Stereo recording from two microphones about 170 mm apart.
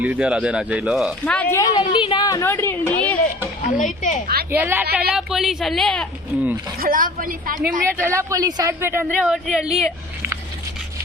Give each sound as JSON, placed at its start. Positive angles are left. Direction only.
{"t": 0.0, "sound": "speech", "side_deg": -10}
{"t": 1.2, "sound": "a woman's voice", "side_deg": 10}
{"t": 3.7, "sound": "speech", "side_deg": 50}
{"t": 4.5, "sound": "a woman's voice", "side_deg": -10}
{"t": 6.3, "sound": "speech", "side_deg": -10}
{"t": 6.7, "sound": "speech", "side_deg": -55}
{"t": 8.0, "sound": "speech", "side_deg": -15}